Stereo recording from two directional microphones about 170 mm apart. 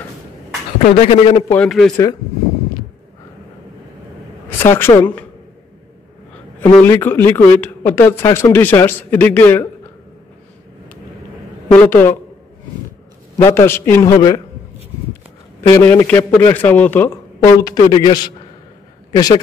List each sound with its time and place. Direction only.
0.8 s a man's voice: 40° left (ahead or behind)
1.5 s speech: 5° left (ahead or behind)
4.5 s speech: 15° left (ahead or behind)
6.6 s speech: 10° left (ahead or behind)
11.7 s speech: 10° left (ahead or behind)
13.4 s speech: 15° left (ahead or behind)
15.7 s speech: 15° left (ahead or behind)
17.6 s a man's voice: 20° left (ahead or behind)